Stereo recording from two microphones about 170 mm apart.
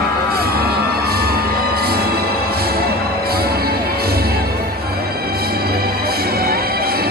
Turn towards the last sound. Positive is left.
turn(degrees=-65)  # may be behind; listen again after turning